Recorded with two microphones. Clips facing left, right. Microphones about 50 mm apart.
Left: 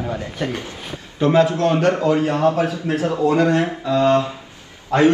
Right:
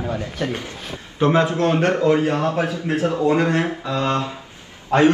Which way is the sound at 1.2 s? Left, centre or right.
Right.